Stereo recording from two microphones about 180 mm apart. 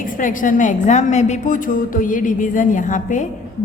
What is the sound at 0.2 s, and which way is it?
A woman's voice, 45° left (ahead or behind).